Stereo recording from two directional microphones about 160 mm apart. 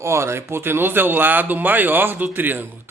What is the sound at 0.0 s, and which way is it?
Speech, 15° right (ahead or behind).